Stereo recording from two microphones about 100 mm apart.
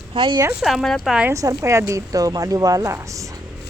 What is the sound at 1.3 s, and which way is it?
A woman's voice, 30° right (ahead or behind).